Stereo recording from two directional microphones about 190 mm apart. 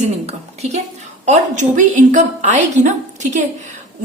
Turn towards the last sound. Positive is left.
turn(degrees=-40)  # may be behind; listen again after turning